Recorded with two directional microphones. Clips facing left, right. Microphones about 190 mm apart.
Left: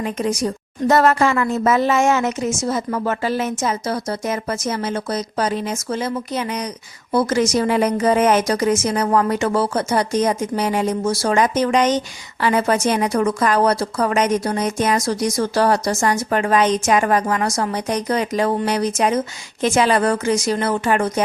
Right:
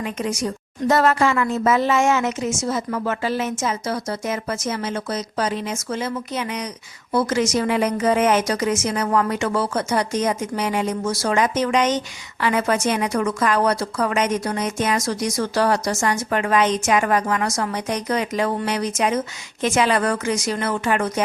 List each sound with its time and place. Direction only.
0.0 s a woman's voice: 35° left (ahead or behind)